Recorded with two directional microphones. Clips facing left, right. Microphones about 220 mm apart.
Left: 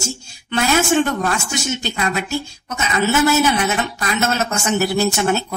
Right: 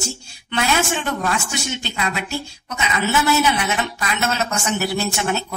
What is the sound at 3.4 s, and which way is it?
A woman's voice, 45° left (ahead or behind).